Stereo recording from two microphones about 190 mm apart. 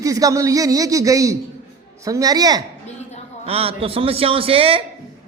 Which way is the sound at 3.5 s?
30° right (ahead or behind).